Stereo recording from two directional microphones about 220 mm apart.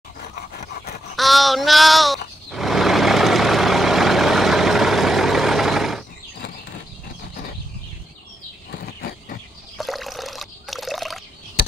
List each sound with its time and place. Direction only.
0.7 s dog: 45° left (ahead or behind)
1.1 s a sound: centre (ahead or behind)
9.8 s water: centre (ahead or behind)